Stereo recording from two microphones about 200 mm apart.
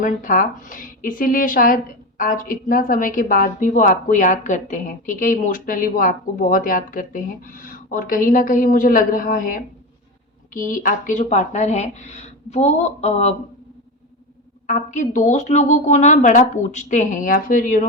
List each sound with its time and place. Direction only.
0.0 s a woman's voice: 40° left (ahead or behind)
14.7 s a woman's voice: 40° left (ahead or behind)